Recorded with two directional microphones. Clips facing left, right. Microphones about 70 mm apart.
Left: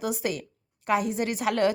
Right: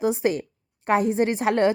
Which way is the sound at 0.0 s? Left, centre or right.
Right.